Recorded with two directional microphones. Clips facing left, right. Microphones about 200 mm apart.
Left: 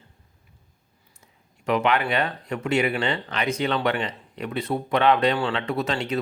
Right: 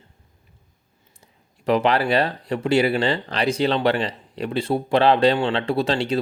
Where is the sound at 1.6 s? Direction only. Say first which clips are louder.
Right 3 dB; 35° right (ahead or behind).